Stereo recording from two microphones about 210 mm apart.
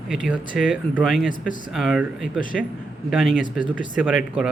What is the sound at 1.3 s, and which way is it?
Speech, 40° left (ahead or behind).